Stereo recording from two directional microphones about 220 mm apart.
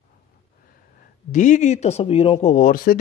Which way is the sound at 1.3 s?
35° left (ahead or behind).